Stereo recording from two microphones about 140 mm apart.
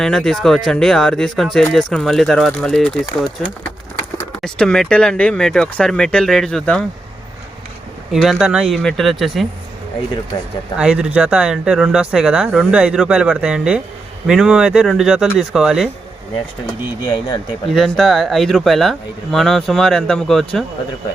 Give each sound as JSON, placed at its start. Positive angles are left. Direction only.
{"t": 0.0, "sound": "speech", "side_deg": 5}
{"t": 4.4, "sound": "speech", "side_deg": 5}
{"t": 8.1, "sound": "speech", "side_deg": 0}
{"t": 10.8, "sound": "speech", "side_deg": -5}
{"t": 17.1, "sound": "speech", "side_deg": 30}
{"t": 17.7, "sound": "speech", "side_deg": 0}